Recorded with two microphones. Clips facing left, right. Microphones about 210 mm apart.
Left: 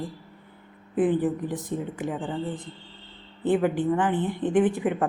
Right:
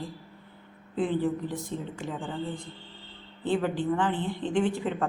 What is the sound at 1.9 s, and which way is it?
A woman's voice, 15° left (ahead or behind).